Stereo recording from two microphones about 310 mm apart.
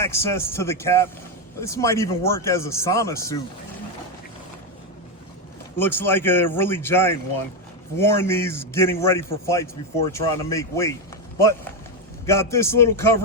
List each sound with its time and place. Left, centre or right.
0.0 s a man's voice: centre
5.7 s a man's voice: centre
12.2 s a man's voice: centre